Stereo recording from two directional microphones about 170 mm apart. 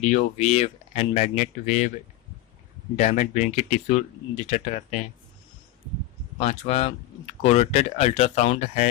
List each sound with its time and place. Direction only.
0.0 s speech: 45° left (ahead or behind)
3.0 s speech: 45° left (ahead or behind)
6.4 s speech: 40° left (ahead or behind)